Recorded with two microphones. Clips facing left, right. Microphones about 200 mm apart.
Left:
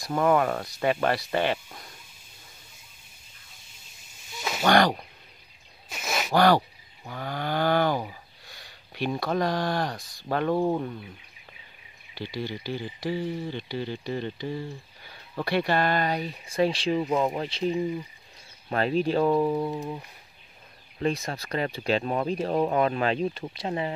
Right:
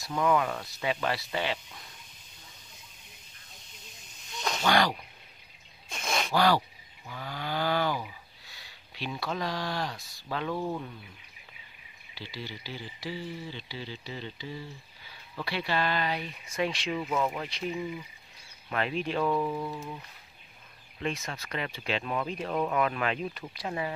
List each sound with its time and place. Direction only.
0.0 s speech: 45° left (ahead or behind)
0.8 s speech: 55° left (ahead or behind)
4.3 s snake: 5° left (ahead or behind)
4.6 s speech: 50° left (ahead or behind)
5.9 s gasp: 5° left (ahead or behind)
6.3 s speech: 55° left (ahead or behind)
7.1 s snoring: 50° left (ahead or behind)
12.2 s speech: 50° left (ahead or behind)
21.0 s speech: 35° left (ahead or behind)